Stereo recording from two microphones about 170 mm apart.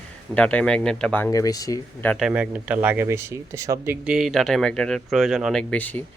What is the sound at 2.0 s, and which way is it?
Speech, 10° left (ahead or behind).